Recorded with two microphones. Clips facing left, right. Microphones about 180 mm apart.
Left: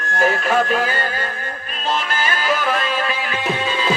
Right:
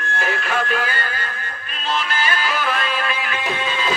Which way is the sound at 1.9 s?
45° left (ahead or behind).